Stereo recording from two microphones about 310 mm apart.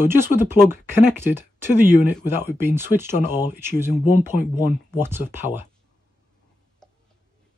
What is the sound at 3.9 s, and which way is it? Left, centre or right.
Speech, left.